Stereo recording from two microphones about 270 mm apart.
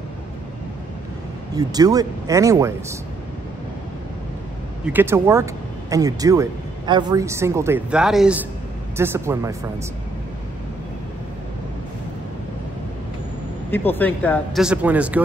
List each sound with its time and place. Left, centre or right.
1.5 s speech: centre
4.8 s speech: centre
13.7 s speech: centre